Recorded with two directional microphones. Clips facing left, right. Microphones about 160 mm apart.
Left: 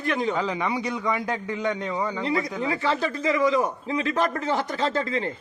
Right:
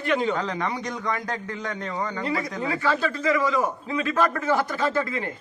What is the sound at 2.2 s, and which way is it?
Speech, 20° left (ahead or behind).